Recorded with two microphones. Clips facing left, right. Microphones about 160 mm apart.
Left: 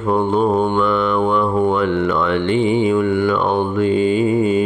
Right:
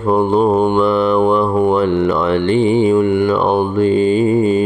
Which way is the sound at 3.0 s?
20° right (ahead or behind).